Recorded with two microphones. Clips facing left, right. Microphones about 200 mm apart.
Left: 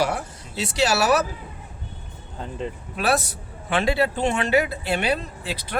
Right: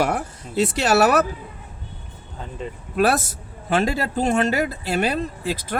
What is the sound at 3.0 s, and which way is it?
Speech, 50° right (ahead or behind).